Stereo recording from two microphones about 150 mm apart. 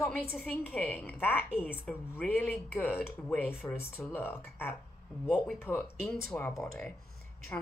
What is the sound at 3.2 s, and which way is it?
Speech, 15° left (ahead or behind).